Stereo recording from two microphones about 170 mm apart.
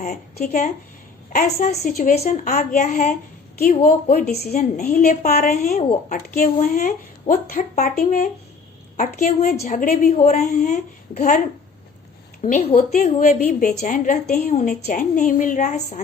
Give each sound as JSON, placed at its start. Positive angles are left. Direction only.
{"t": 0.3, "sound": "a woman's voice", "side_deg": 45}
{"t": 4.8, "sound": "a woman's voice", "side_deg": 45}
{"t": 5.7, "sound": "speech", "side_deg": 45}
{"t": 9.0, "sound": "speech", "side_deg": 50}
{"t": 12.4, "sound": "speech", "side_deg": 40}